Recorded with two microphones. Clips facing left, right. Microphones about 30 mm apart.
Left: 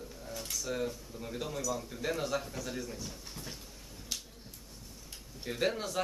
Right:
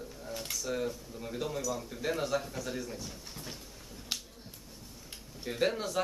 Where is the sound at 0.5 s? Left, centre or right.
Centre.